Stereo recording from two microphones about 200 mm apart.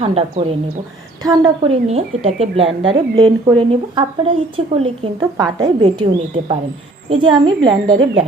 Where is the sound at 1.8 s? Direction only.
30° right (ahead or behind).